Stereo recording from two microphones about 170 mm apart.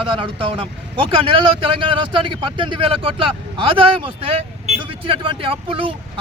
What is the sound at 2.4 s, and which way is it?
Speech, 30° right (ahead or behind).